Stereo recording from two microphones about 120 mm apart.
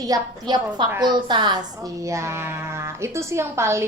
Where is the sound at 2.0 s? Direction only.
25° right (ahead or behind).